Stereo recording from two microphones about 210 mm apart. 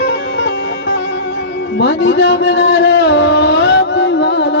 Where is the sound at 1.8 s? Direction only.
55° left (ahead or behind).